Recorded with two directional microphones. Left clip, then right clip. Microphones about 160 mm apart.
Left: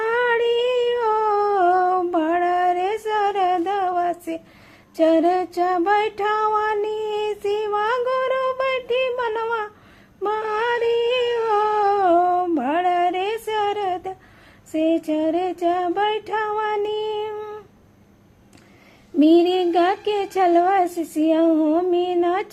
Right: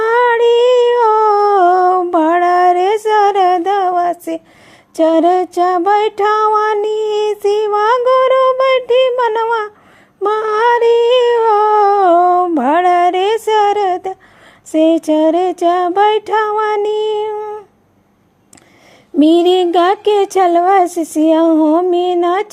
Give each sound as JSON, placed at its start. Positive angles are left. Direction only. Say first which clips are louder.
{"t": 0.0, "sound": "humming", "louder": "right 9 dB", "side_deg": -40}
{"t": 4.9, "sound": "music", "louder": "right 7 dB", "side_deg": -40}
{"t": 10.2, "sound": "humming", "louder": "right 10 dB", "side_deg": -45}
{"t": 14.7, "sound": "child singing", "louder": "right 9 dB", "side_deg": -45}
{"t": 17.3, "sound": "humming", "louder": "right 9 dB", "side_deg": -25}
{"t": 19.2, "sound": "speech", "louder": "right 6 dB", "side_deg": -50}
{"t": 21.5, "sound": "music", "louder": "right 8 dB", "side_deg": -20}
{"t": 21.8, "sound": "speech", "louder": "right 7 dB", "side_deg": -40}